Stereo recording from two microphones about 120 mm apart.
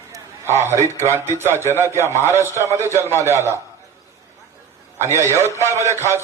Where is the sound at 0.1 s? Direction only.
20° right (ahead or behind).